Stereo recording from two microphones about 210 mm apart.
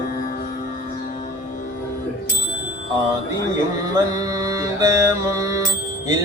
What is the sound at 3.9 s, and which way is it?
Music, 15° right (ahead or behind).